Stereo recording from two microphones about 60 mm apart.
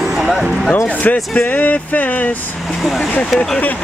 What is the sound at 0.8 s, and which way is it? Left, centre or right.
Speech, left.